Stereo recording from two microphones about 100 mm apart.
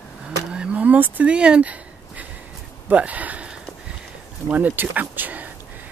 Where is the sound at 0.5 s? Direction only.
10° right (ahead or behind).